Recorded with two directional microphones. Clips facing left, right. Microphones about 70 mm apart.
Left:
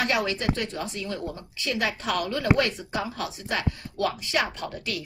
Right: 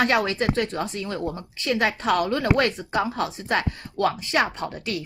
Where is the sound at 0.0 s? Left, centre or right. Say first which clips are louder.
Right 4 dB; right.